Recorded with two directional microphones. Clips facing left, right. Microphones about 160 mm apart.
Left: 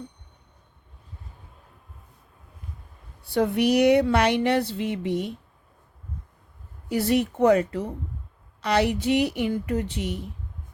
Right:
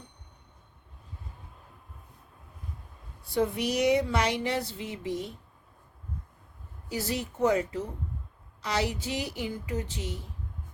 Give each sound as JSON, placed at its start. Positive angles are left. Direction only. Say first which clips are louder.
{"t": 3.2, "sound": "a woman's voice", "louder": "left 6 dB", "side_deg": 65}
{"t": 6.8, "sound": "a woman's voice", "louder": "left 10 dB", "side_deg": 60}